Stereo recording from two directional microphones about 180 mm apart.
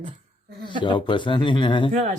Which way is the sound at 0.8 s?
25° left (ahead or behind).